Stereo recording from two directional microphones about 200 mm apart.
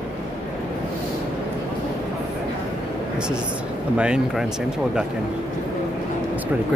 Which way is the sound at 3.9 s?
5° right (ahead or behind).